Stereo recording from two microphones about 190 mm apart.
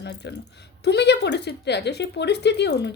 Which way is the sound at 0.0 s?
65° left (ahead or behind).